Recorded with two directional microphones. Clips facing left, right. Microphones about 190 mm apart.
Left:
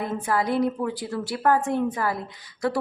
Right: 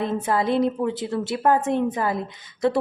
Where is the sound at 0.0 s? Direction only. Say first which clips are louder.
Right 3 dB; 25° right (ahead or behind).